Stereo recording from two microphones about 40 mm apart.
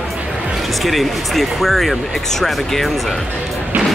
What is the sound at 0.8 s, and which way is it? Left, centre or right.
Speech, centre.